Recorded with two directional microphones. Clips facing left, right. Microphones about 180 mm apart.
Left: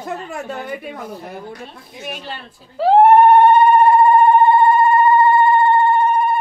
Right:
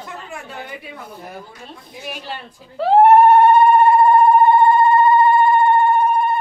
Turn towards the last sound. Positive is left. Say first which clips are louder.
# left 1 dB
turn(degrees=0)  # may be behind; listen again after turning